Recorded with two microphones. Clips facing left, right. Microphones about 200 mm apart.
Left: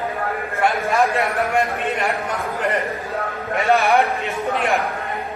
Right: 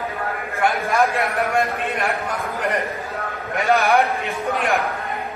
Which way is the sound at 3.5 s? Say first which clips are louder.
Left 1 dB; centre (ahead or behind).